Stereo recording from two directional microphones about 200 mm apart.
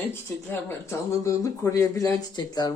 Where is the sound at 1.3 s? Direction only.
15° left (ahead or behind).